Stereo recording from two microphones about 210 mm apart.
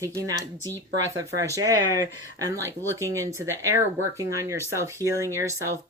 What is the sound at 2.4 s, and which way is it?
Speech, 15° right (ahead or behind).